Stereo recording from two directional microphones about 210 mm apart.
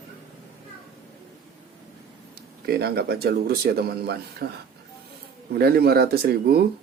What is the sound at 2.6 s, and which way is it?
Speech, 50° right (ahead or behind).